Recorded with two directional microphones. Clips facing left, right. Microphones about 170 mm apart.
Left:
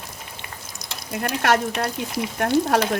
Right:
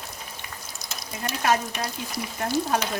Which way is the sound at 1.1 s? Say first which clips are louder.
Left 4 dB; 70° left (ahead or behind).